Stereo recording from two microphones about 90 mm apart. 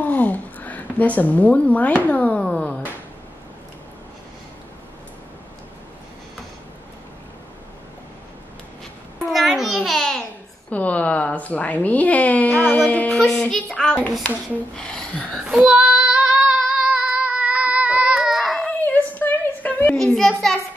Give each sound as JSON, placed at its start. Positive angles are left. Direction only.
{"t": 0.0, "sound": "speech", "side_deg": 20}
{"t": 9.2, "sound": "babbling", "side_deg": 0}
{"t": 10.7, "sound": "speech", "side_deg": 15}
{"t": 15.4, "sound": "female singing", "side_deg": -15}
{"t": 18.7, "sound": "a sound", "side_deg": 20}
{"t": 20.0, "sound": "a child's voice", "side_deg": 5}